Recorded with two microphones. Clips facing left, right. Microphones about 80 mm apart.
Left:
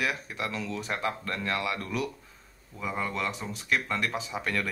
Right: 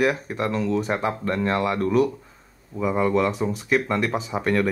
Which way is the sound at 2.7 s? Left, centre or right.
Centre.